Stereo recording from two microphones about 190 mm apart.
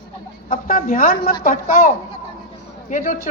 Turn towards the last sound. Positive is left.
turn(degrees=45)  # may be behind; listen again after turning